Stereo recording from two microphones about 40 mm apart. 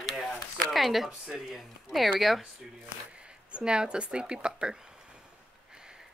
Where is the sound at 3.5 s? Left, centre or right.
Right.